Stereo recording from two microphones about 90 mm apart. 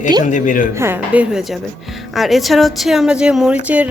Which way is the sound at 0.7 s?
30° right (ahead or behind).